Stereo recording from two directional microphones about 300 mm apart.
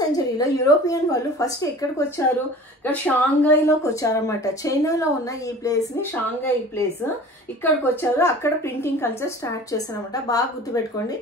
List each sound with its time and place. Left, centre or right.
0.0 s a woman's voice: centre
7.6 s a woman's voice: centre